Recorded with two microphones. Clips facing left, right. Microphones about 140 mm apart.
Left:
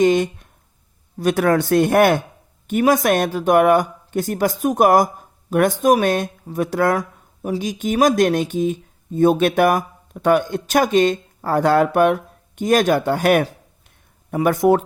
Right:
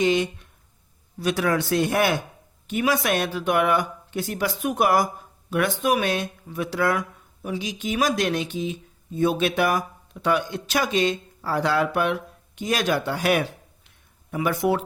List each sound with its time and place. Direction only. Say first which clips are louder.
0.0 s speech: left 6 dB; 45° left (ahead or behind)